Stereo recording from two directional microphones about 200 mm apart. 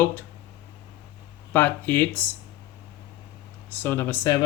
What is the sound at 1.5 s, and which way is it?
Speech, 10° left (ahead or behind).